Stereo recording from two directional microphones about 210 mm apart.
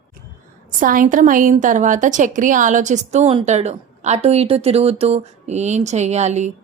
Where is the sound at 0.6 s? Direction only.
40° right (ahead or behind).